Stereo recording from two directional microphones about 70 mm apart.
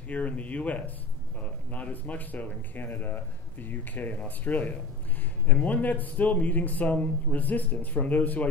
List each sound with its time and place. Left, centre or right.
0.1 s speech: left